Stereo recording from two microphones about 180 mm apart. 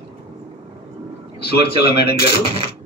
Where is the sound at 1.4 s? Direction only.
60° left (ahead or behind).